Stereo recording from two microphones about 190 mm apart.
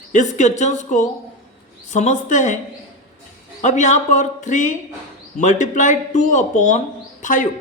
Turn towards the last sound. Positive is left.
turn(degrees=45)  # may be behind; listen again after turning